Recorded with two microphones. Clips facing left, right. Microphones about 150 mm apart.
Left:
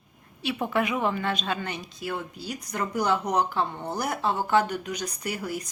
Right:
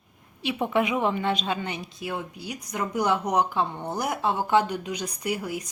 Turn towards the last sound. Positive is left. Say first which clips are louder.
# right 2 dB
turn(degrees=-10)  # may be behind; listen again after turning